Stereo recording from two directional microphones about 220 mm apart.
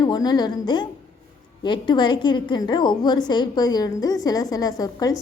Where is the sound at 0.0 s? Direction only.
15° left (ahead or behind).